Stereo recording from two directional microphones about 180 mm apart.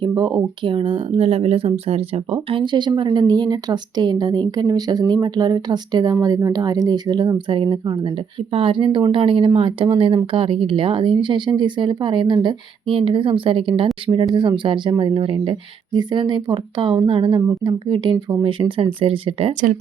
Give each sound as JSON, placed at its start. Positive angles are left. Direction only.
{"t": 0.0, "sound": "speech", "side_deg": -25}
{"t": 18.9, "sound": "speech", "side_deg": -30}